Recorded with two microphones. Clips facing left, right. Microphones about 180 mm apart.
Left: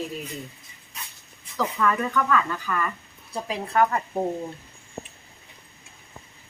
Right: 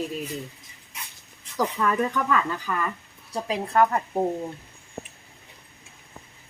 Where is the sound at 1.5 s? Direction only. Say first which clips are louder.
Even; 15° right (ahead or behind).